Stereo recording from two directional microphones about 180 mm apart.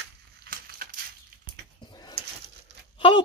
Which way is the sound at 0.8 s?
50° right (ahead or behind).